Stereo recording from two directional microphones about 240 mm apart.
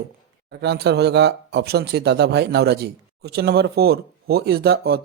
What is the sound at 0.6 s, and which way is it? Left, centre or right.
Speech, right.